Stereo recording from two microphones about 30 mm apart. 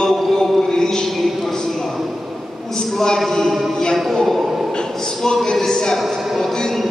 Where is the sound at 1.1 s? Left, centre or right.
Centre.